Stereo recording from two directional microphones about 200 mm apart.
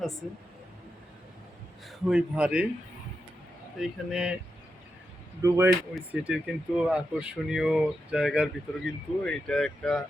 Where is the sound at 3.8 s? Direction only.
5° right (ahead or behind).